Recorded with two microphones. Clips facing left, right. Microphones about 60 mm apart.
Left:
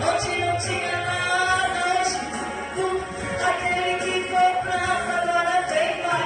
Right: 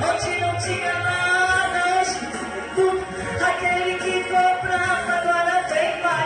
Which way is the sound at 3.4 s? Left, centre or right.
Right.